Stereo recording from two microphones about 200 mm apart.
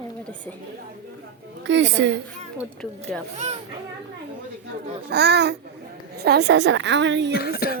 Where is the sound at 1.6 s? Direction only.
60° right (ahead or behind).